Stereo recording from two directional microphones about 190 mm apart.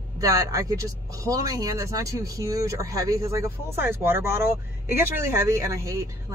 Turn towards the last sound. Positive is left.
turn(degrees=-15)  # may be behind; listen again after turning